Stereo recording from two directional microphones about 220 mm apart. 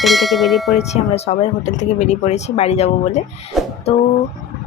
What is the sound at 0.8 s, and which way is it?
Speech, 30° left (ahead or behind).